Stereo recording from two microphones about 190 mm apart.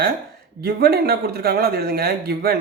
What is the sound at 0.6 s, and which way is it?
Speech, 55° right (ahead or behind).